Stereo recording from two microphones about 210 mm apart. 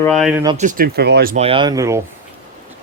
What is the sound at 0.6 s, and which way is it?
Speech, 40° right (ahead or behind).